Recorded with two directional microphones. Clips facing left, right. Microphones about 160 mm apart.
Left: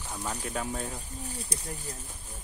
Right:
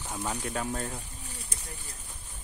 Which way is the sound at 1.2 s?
40° left (ahead or behind).